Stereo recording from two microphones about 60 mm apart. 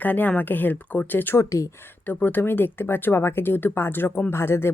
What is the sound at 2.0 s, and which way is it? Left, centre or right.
Speech, left.